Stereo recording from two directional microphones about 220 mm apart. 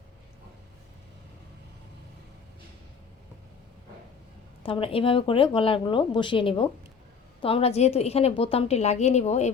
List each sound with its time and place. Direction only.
4.6 s speech: 25° left (ahead or behind)